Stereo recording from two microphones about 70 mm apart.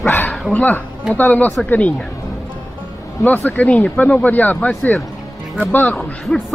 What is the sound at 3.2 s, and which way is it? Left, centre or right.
Speech, left.